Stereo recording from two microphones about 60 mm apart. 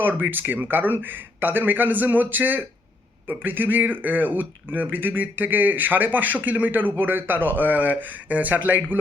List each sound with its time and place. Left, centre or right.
0.0 s speech: right